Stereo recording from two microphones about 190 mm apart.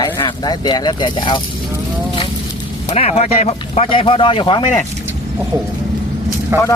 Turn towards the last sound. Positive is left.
turn(degrees=-15)  # may be behind; listen again after turning